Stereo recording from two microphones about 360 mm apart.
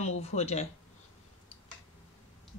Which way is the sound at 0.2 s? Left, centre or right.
Centre.